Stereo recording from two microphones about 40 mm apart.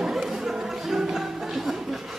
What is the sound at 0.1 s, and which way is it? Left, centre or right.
Music, centre.